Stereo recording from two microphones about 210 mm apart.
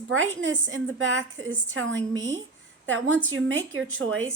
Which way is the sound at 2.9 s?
65° right (ahead or behind).